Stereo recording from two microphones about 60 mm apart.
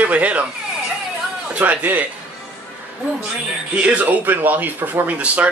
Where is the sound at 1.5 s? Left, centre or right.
Right.